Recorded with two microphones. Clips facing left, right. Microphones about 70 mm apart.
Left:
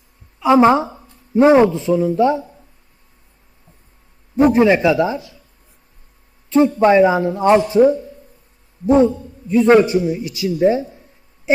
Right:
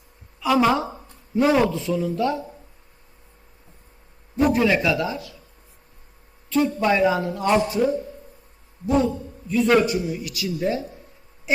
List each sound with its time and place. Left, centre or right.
0.3 s a man's voice: left
4.4 s a man's voice: left
6.7 s a man's voice: left
11.5 s a sound: left